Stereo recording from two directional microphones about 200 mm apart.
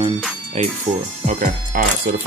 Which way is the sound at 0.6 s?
35° right (ahead or behind).